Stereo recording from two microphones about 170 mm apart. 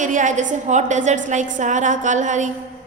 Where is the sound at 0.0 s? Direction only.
50° right (ahead or behind).